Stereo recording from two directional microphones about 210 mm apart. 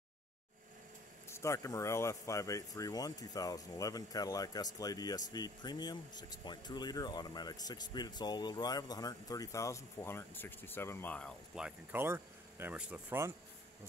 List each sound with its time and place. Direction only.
1.3 s speech: 15° left (ahead or behind); by 13.3 s 10° right (ahead or behind)